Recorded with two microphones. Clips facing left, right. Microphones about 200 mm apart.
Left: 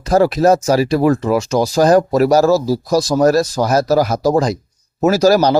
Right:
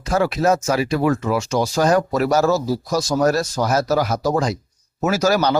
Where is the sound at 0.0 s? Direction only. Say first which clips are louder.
Left 6 dB; 35° left (ahead or behind).